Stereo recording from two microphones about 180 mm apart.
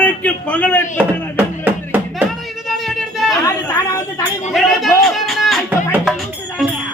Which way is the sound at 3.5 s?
15° left (ahead or behind).